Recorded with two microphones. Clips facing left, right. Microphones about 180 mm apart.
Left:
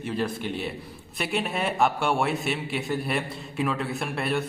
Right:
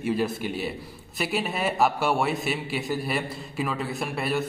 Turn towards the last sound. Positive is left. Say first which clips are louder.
# even
turn(degrees=0)  # may be behind; listen again after turning